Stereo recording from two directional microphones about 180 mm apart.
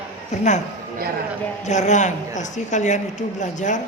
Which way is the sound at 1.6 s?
40° left (ahead or behind).